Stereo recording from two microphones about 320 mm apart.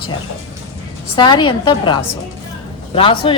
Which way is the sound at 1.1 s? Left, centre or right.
Centre.